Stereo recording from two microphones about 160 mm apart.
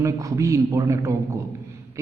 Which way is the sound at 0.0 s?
20° right (ahead or behind).